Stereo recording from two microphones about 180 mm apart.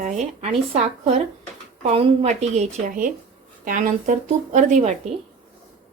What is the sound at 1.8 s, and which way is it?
Speech, 35° right (ahead or behind).